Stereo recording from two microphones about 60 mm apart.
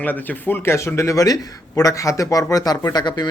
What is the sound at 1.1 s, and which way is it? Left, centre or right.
Speech, left.